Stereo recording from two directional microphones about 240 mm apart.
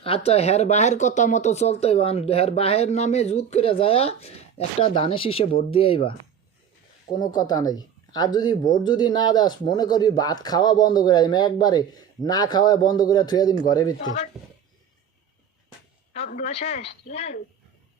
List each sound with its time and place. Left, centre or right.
0.0 s speech: left
7.2 s speech: centre
14.0 s speech: left
16.1 s speech: left